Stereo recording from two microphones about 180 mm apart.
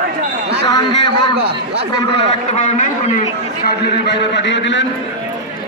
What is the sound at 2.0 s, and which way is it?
Speech, 35° left (ahead or behind).